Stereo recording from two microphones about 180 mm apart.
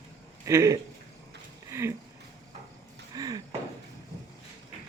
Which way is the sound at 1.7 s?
15° right (ahead or behind).